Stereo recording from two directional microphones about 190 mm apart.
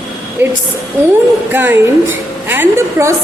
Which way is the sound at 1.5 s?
10° right (ahead or behind).